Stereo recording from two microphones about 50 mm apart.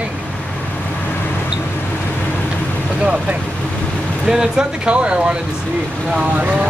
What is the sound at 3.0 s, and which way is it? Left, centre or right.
Boat, right.